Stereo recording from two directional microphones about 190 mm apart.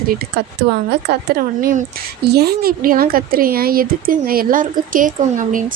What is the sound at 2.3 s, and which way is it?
Speech, 55° right (ahead or behind).